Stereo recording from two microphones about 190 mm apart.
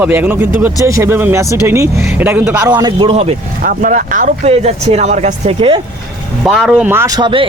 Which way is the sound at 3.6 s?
45° right (ahead or behind).